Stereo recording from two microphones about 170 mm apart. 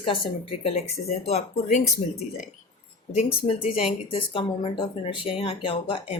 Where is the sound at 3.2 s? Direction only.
35° left (ahead or behind).